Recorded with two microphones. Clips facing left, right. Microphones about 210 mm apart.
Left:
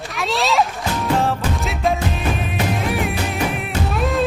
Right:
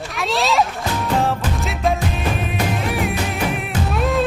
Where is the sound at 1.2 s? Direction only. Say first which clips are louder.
Even; centre (ahead or behind).